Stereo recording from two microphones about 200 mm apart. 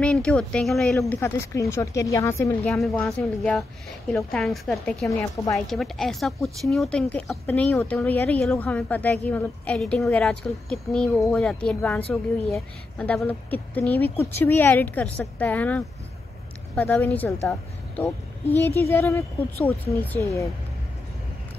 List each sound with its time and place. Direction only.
0.0 s a woman's voice: 5° left (ahead or behind)
3.1 s speech: centre (ahead or behind)
5.1 s a woman's voice: 15° left (ahead or behind)
5.7 s a woman's voice: centre (ahead or behind)